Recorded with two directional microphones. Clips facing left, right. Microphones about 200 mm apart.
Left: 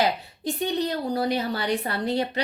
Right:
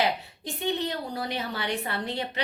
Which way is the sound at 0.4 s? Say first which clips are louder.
Left 4 dB; 40° left (ahead or behind).